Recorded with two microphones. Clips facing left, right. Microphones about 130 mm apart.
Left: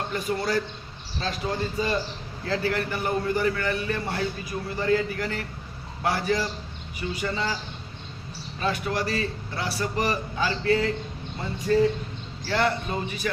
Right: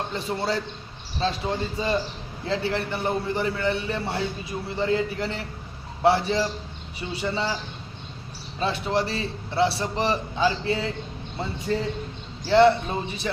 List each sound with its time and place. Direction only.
0.1 s a man's voice: 25° right (ahead or behind)
8.5 s a man's voice: 25° right (ahead or behind)